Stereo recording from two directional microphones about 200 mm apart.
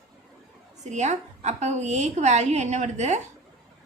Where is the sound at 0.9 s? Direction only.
35° right (ahead or behind).